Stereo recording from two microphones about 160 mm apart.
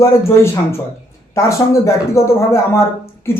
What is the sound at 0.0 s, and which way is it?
Speech, 15° left (ahead or behind).